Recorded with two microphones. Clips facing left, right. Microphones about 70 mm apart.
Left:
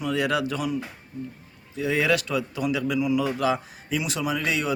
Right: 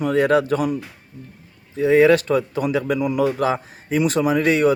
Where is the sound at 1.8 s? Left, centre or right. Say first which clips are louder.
Right 9 dB; right.